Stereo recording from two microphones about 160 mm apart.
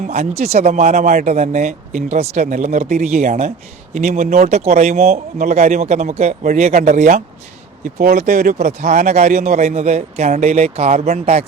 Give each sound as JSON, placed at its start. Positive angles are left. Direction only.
{"t": 0.1, "sound": "speech", "side_deg": -45}